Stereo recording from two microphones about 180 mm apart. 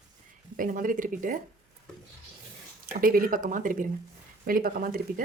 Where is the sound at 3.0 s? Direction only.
50° right (ahead or behind).